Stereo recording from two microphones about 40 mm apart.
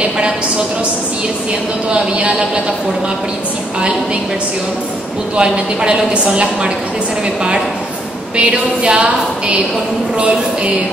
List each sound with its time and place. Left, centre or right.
1.9 s a woman's voice: right
5.4 s a woman's voice: right
8.4 s a woman's voice: right